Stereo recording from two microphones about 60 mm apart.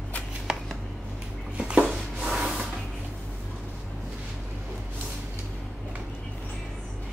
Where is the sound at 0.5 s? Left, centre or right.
Centre.